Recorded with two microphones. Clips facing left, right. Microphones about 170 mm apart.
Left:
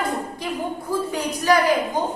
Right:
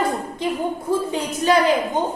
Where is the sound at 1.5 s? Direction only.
25° right (ahead or behind).